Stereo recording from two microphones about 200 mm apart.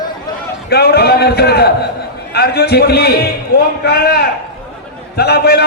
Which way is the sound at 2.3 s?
55° left (ahead or behind).